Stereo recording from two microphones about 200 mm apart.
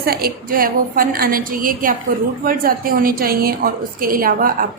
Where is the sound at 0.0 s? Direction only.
50° right (ahead or behind).